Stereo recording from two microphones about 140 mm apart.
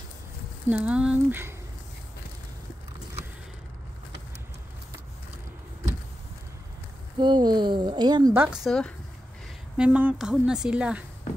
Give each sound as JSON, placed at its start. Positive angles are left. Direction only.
{"t": 0.7, "sound": "a woman's voice", "side_deg": -10}
{"t": 7.2, "sound": "speech", "side_deg": -35}
{"t": 8.5, "sound": "speech", "side_deg": 5}
{"t": 9.8, "sound": "a woman's voice", "side_deg": -10}